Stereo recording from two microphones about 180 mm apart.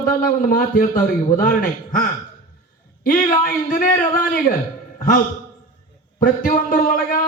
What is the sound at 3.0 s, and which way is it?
Speech, 50° left (ahead or behind).